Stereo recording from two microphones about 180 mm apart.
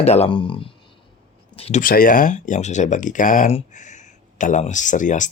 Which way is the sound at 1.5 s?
35° left (ahead or behind).